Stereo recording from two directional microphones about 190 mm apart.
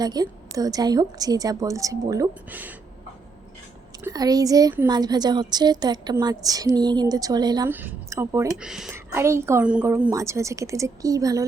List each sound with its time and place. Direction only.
0.0 s a woman's voice: 20° right (ahead or behind)
4.0 s a woman's voice: 20° right (ahead or behind)
7.7 s speech: 10° right (ahead or behind)
8.6 s speech: 5° right (ahead or behind)
8.9 s speech: 15° right (ahead or behind)